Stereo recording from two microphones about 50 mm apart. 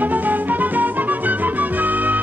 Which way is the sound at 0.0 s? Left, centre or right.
Right.